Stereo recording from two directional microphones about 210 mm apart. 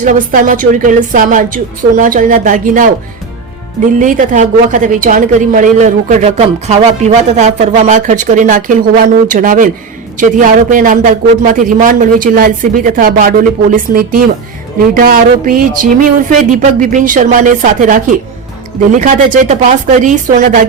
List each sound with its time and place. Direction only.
0.0 s a woman's voice: 40° right (ahead or behind)
3.9 s a woman's voice: 40° right (ahead or behind)
14.9 s music: 40° right (ahead or behind)
16.5 s a woman's voice: 40° right (ahead or behind)